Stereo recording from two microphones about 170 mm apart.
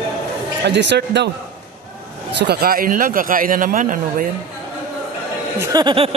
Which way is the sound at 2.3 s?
75° right (ahead or behind).